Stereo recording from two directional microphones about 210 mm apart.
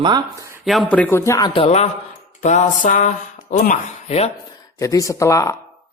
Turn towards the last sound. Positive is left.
turn(degrees=15)  # may be behind; listen again after turning